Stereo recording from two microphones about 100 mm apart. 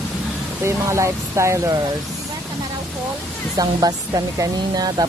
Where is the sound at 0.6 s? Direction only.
30° right (ahead or behind).